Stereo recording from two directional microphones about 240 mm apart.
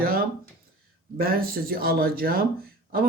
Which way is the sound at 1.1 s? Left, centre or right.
Right.